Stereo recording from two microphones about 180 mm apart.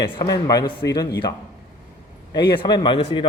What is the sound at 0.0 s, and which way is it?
Speech, 25° left (ahead or behind).